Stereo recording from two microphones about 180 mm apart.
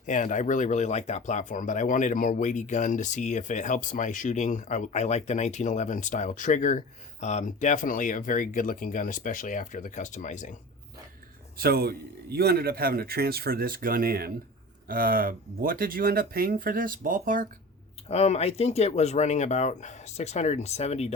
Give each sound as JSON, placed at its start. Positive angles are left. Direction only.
{"t": 0.0, "sound": "speech", "side_deg": 45}
{"t": 11.5, "sound": "a man's voice", "side_deg": -60}
{"t": 18.1, "sound": "speech", "side_deg": 35}